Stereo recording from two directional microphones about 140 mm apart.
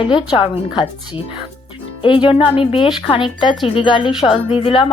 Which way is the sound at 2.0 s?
40° left (ahead or behind).